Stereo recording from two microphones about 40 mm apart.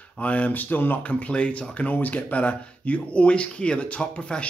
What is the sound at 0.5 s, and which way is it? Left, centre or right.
Speech, left.